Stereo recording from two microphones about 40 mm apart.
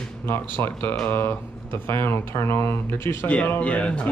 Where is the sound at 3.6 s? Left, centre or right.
Left.